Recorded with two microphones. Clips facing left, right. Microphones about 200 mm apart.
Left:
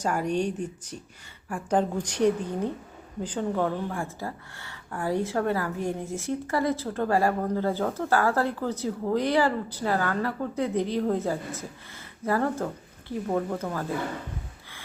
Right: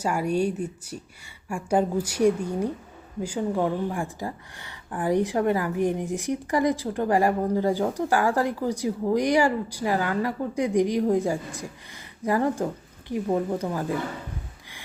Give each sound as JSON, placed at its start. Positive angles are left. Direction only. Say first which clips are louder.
{"t": 0.0, "sound": "speech", "louder": "right 2 dB", "side_deg": -10}